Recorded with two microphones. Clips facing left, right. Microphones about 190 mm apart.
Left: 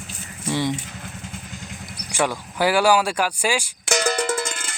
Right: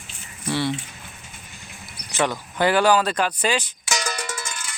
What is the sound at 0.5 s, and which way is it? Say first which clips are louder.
Speech: left 1 dB; 15° left (ahead or behind).